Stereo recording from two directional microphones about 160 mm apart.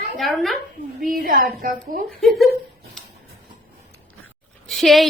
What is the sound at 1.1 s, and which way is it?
Speech, 65° right (ahead or behind).